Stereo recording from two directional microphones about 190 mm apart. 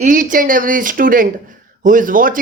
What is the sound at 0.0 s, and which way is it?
A man's voice, 45° right (ahead or behind).